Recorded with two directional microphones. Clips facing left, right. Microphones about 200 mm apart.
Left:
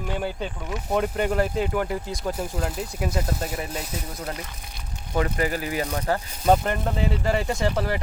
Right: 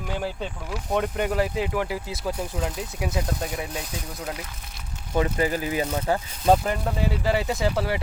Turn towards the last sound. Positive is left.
turn(degrees=-5)  # may be behind; listen again after turning